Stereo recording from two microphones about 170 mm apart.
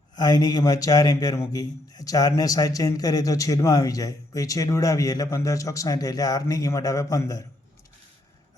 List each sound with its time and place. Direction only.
0.2 s speech: 20° left (ahead or behind)